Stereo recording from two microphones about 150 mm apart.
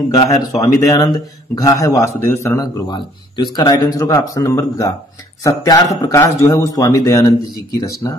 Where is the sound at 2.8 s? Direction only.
30° left (ahead or behind).